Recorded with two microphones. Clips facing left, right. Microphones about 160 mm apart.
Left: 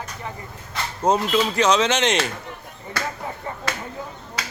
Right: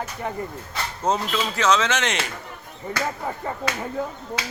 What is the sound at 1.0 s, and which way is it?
Speech, 15° left (ahead or behind).